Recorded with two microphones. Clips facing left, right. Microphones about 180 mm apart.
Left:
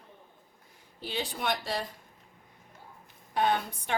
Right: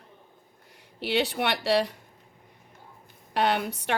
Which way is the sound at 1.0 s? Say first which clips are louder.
Right 7 dB; 75° right (ahead or behind).